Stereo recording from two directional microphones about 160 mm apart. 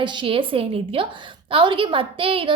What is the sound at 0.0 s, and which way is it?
A woman's voice, 30° right (ahead or behind).